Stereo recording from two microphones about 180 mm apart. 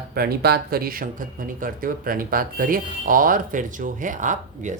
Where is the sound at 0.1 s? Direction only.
60° right (ahead or behind).